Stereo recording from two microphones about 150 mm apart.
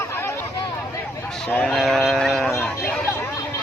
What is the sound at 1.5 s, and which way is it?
Speech, 5° left (ahead or behind).